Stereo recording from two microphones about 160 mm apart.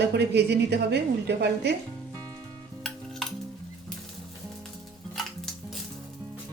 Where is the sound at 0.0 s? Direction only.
90° right.